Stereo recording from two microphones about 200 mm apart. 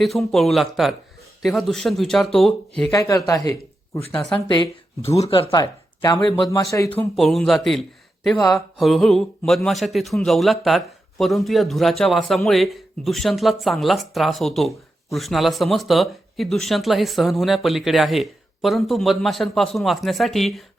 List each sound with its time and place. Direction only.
0.0 s speech: centre (ahead or behind)
2.9 s speech: 15° left (ahead or behind)
7.2 s speech: centre (ahead or behind)